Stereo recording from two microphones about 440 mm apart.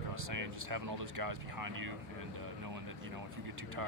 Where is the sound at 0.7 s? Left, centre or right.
Right.